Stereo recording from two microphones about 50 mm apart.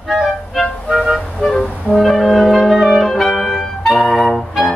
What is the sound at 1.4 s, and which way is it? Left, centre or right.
Music, centre.